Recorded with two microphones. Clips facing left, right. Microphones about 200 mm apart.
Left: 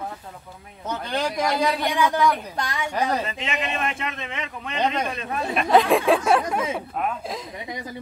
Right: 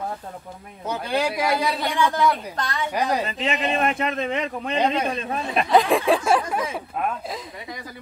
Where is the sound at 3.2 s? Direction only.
35° right (ahead or behind).